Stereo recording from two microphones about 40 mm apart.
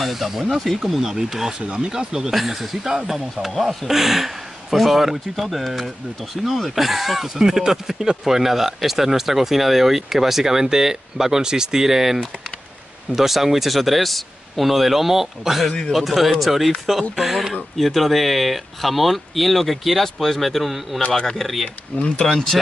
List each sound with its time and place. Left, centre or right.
0.0 s speech: centre
2.3 s speech: centre
7.3 s speech: centre
21.9 s speech: left
22.2 s speech: centre